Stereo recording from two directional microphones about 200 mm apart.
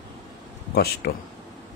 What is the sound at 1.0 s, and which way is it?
Speech, 55° left (ahead or behind).